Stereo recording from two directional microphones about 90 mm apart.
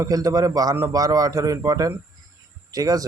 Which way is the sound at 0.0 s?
40° right (ahead or behind).